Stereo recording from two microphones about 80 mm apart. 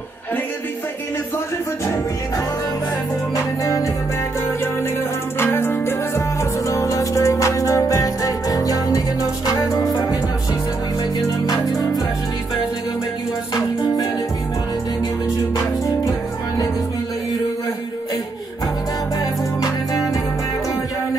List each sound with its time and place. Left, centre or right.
3.6 s music: left
5.4 s music: left
6.7 s music: left
19.6 s music: left